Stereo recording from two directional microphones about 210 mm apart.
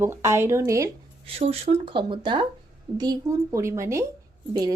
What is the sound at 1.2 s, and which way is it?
A woman's voice, 25° right (ahead or behind).